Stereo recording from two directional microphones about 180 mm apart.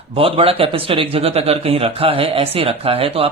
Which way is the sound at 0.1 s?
30° right (ahead or behind).